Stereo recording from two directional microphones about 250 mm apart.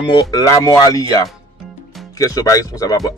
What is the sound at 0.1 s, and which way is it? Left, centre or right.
Speech, centre.